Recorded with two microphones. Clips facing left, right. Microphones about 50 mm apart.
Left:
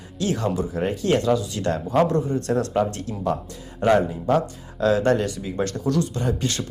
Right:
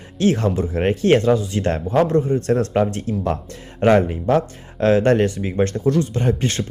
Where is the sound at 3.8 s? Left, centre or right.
Right.